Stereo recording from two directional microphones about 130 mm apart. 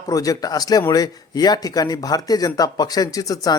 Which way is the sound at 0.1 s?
25° left (ahead or behind).